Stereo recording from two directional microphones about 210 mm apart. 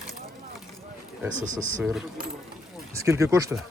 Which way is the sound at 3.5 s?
5° right (ahead or behind).